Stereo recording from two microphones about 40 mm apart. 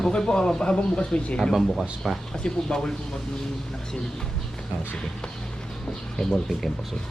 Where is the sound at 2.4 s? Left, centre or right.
Left.